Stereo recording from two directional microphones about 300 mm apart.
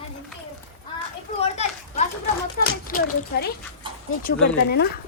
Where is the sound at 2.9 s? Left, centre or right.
Left.